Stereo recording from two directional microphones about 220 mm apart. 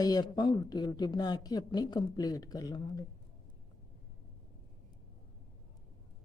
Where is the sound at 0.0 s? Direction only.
20° left (ahead or behind).